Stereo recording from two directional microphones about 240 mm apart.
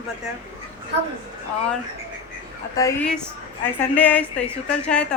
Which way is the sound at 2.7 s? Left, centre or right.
Centre.